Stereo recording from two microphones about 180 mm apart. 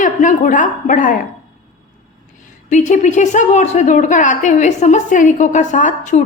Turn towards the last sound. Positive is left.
turn(degrees=45)  # may be behind; listen again after turning